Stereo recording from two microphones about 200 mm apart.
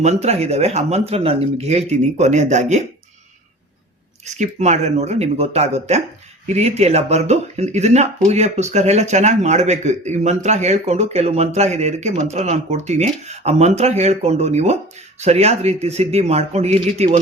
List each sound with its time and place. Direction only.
0.0 s speech: 30° right (ahead or behind)
4.4 s speech: 35° right (ahead or behind)